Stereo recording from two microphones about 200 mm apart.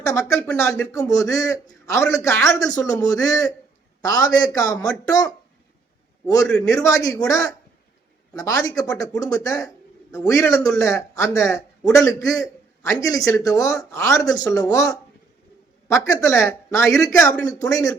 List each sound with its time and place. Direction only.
0.0 s speech: 15° left (ahead or behind)
0.3 s speech: 5° left (ahead or behind)
0.9 s a man's voice: 15° left (ahead or behind)